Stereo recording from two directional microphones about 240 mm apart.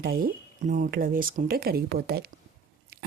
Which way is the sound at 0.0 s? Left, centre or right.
Right.